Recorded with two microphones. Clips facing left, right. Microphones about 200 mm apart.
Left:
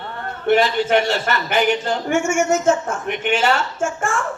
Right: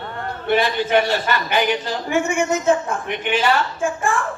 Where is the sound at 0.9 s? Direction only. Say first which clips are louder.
Even; 50° left (ahead or behind).